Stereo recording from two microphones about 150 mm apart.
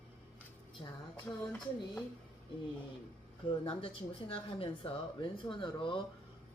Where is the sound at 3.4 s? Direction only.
35° left (ahead or behind).